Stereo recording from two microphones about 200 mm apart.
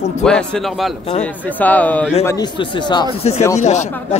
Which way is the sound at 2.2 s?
20° left (ahead or behind).